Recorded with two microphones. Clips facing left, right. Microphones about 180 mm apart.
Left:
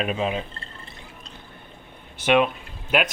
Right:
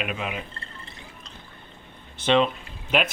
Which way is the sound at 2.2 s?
10° left (ahead or behind).